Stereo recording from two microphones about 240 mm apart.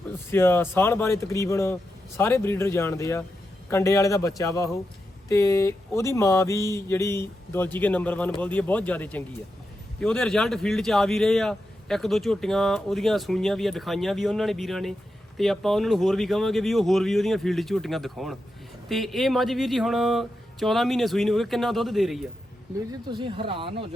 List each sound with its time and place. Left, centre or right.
0.1 s speech: centre
23.1 s speech: right